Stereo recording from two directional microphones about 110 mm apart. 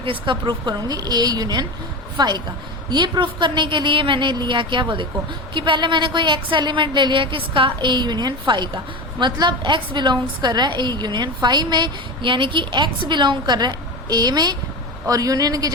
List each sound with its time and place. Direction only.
0.0 s a woman's voice: 50° right (ahead or behind)